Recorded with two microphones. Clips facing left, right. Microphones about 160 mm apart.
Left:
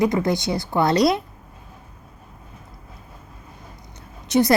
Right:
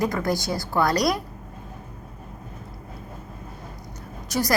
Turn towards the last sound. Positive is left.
turn(degrees=20)  # may be behind; listen again after turning